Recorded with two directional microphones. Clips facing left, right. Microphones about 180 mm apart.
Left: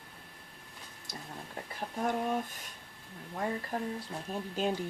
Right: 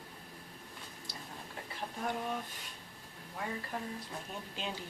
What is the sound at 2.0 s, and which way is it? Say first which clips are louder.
Speech: left 6 dB; 45° left (ahead or behind).